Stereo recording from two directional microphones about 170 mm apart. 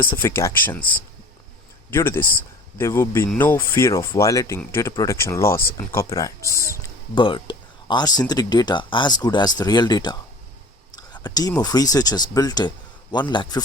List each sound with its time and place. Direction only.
0.3 s speech: 15° left (ahead or behind)
1.9 s speech: 15° left (ahead or behind)